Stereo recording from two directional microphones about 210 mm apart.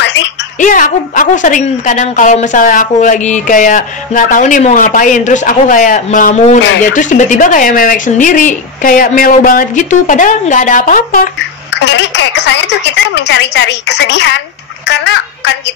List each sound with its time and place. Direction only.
0.0 s a sound: 55° left (ahead or behind)
0.6 s a woman's voice: 40° left (ahead or behind)
11.8 s a woman's voice: 55° left (ahead or behind)